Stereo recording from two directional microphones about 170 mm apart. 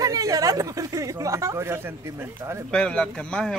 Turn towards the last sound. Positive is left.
turn(degrees=5)  # may be behind; listen again after turning